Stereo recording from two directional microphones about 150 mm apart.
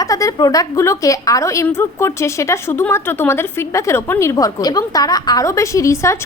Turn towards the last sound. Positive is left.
turn(degrees=20)  # may be behind; listen again after turning